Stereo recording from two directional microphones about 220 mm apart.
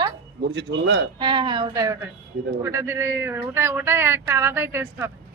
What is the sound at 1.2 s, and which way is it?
A woman's voice, 20° right (ahead or behind).